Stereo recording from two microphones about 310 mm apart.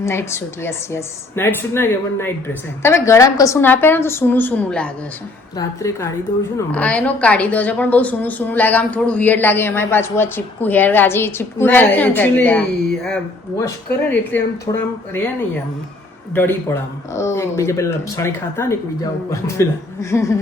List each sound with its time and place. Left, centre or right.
0.0 s a woman's voice: centre
16.3 s speech: centre